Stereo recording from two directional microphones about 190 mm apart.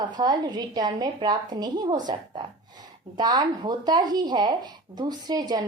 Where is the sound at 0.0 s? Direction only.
20° right (ahead or behind).